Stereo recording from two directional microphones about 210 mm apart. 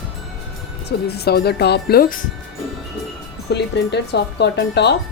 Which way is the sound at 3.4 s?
55° left (ahead or behind).